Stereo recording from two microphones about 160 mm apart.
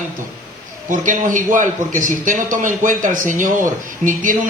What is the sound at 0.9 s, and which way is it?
A man's voice, 50° right (ahead or behind).